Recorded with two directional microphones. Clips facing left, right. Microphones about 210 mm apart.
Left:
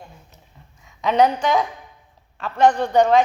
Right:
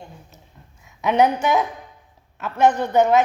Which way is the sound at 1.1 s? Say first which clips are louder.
Even; 10° right (ahead or behind).